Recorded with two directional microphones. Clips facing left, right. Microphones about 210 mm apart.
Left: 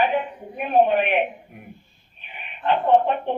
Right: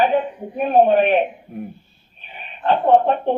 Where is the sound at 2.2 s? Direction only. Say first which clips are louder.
Right 3 dB; 40° right (ahead or behind).